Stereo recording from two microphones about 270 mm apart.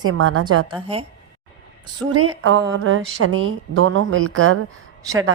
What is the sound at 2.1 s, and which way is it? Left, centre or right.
A woman's voice, right.